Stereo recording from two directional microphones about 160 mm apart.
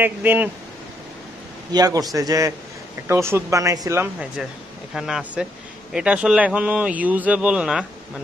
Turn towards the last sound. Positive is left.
turn(degrees=-5)  # may be behind; listen again after turning